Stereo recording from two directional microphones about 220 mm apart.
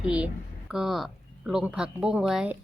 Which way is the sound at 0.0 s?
5° right (ahead or behind).